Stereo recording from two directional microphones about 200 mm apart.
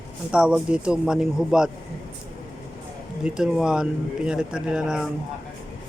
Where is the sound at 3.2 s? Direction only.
5° right (ahead or behind).